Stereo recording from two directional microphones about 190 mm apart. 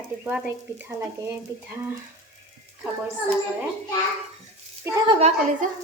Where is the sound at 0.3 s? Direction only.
10° right (ahead or behind).